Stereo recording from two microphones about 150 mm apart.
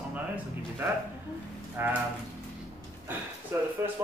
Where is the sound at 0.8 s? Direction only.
15° right (ahead or behind).